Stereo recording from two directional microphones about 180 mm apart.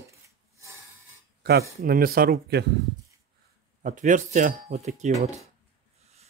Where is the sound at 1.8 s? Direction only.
55° right (ahead or behind).